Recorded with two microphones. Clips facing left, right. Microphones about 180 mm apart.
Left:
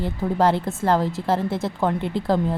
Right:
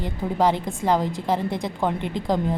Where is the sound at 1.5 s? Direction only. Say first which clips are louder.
Left 2 dB; 5° left (ahead or behind).